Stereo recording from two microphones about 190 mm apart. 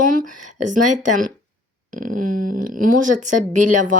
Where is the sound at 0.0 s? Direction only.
45° right (ahead or behind).